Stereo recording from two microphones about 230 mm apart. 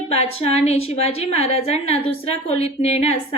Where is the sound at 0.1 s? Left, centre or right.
Left.